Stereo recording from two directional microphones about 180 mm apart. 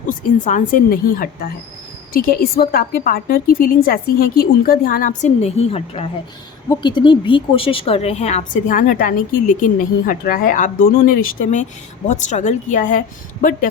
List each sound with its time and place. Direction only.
0.1 s speech: 45° left (ahead or behind)
12.0 s speech: 40° left (ahead or behind)